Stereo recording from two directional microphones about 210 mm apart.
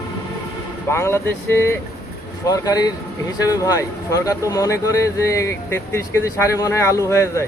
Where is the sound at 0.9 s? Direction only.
10° left (ahead or behind).